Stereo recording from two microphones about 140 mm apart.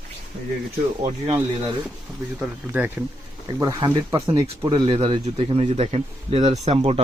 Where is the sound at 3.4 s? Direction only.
30° right (ahead or behind).